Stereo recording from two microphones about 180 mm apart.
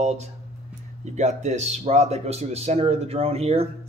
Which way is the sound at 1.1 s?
40° right (ahead or behind).